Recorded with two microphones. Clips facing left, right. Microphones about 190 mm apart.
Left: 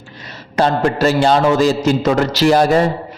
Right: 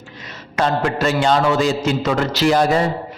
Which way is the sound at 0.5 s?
35° left (ahead or behind).